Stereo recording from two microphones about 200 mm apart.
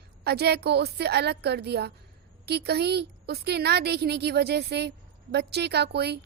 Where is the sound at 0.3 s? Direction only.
55° right (ahead or behind).